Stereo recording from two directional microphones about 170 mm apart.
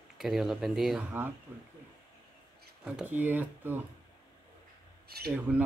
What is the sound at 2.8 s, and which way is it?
Speech, 5° right (ahead or behind).